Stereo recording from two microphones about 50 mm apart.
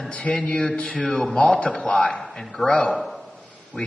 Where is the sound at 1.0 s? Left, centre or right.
Centre.